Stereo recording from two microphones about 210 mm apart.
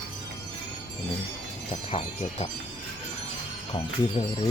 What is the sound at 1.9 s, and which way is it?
Speech, 30° left (ahead or behind).